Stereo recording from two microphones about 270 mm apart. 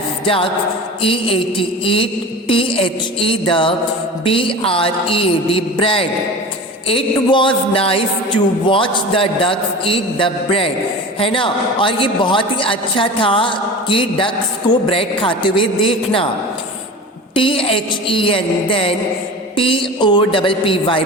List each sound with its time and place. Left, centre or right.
0.3 s a man's voice: centre
17.3 s a man's voice: centre